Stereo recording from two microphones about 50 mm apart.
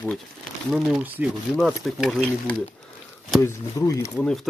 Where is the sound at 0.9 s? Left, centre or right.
Right.